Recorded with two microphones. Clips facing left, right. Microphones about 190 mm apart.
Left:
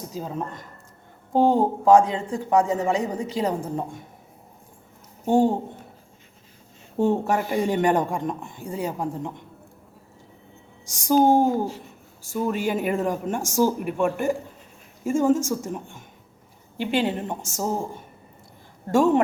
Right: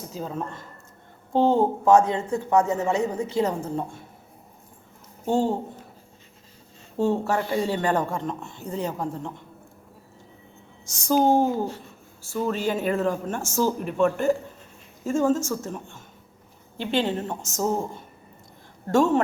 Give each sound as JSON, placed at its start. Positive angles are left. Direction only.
{"t": 0.1, "sound": "speech", "side_deg": 10}
{"t": 5.2, "sound": "speech", "side_deg": 15}
{"t": 7.0, "sound": "speech", "side_deg": 15}
{"t": 10.8, "sound": "speech", "side_deg": 10}